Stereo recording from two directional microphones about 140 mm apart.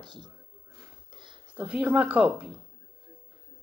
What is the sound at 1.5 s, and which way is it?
Speech, 10° right (ahead or behind).